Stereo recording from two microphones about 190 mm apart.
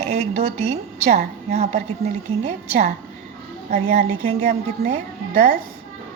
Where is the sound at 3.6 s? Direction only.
50° right (ahead or behind).